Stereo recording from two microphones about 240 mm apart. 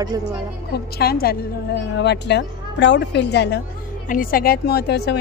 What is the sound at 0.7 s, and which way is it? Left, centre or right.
A woman's voice, left.